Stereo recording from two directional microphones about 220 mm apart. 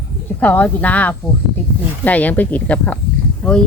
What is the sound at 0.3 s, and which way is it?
Speech, 5° left (ahead or behind).